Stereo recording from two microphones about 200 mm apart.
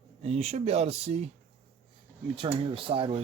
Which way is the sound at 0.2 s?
30° right (ahead or behind).